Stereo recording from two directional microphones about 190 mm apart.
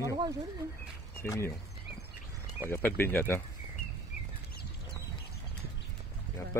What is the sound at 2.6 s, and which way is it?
Speech, 10° left (ahead or behind).